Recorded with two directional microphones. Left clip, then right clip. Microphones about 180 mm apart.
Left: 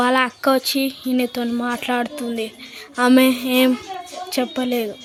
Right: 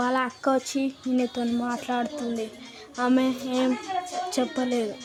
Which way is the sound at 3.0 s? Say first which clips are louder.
Left 9 dB; 20° left (ahead or behind).